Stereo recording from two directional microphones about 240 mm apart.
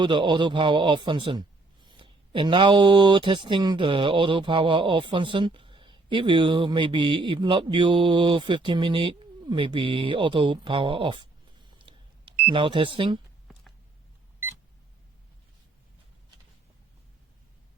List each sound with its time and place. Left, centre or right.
0.0 s speech: centre
11.9 s a sound: right
12.5 s speech: right